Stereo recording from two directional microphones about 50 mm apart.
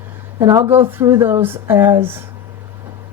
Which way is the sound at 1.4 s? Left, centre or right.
Right.